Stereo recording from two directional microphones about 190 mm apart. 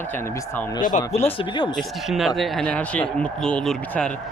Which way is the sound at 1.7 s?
Centre (ahead or behind).